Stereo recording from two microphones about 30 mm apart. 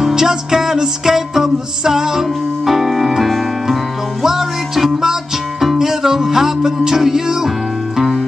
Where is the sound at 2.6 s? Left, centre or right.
Centre.